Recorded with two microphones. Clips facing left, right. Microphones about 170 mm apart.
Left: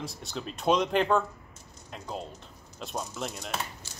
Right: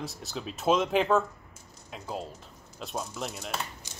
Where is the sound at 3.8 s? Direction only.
20° right (ahead or behind).